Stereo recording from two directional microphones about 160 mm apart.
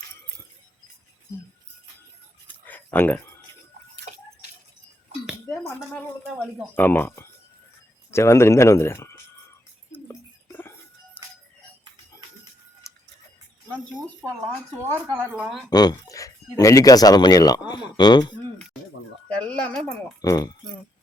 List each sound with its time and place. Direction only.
2.5 s a sound: 10° left (ahead or behind)
5.5 s dishes: 15° left (ahead or behind)
5.9 s speech: centre (ahead or behind)
6.7 s speech: 10° left (ahead or behind)
9.9 s music: 15° left (ahead or behind)
14.8 s speech: 10° right (ahead or behind)
15.7 s speech: 25° left (ahead or behind)
19.5 s speech: 5° left (ahead or behind)
20.2 s speech: 20° left (ahead or behind)